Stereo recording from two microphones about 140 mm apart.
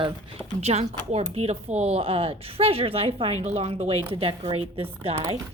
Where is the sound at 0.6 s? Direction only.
50° right (ahead or behind).